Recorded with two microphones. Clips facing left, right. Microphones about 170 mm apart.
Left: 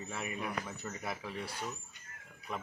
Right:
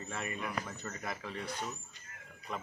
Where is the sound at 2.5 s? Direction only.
10° left (ahead or behind).